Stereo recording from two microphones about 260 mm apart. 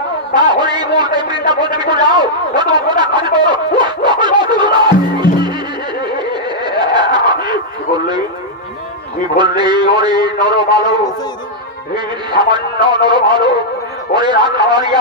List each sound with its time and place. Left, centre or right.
0.3 s a sound: centre
6.1 s snicker: centre
9.4 s a man's voice: centre
12.3 s a man's voice: centre